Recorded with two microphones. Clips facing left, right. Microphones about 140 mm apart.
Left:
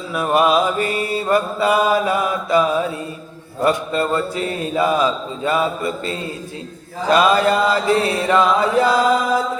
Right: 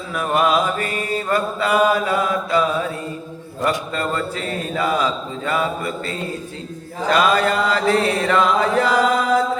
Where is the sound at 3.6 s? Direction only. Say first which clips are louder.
Left 4 dB; 20° left (ahead or behind).